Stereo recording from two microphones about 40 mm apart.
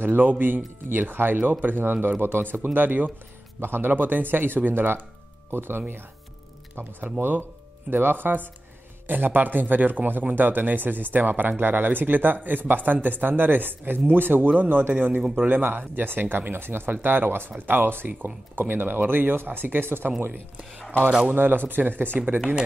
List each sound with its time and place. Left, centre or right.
0.0 s speech: right
1.8 s speech: right
3.6 s speech: right
6.7 s speech: right
14.5 s speech: right
15.3 s speech: right
15.8 s speech: right
16.9 s speech: right
21.4 s speech: right